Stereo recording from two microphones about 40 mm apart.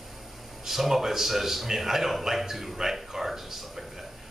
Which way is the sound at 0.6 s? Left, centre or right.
Centre.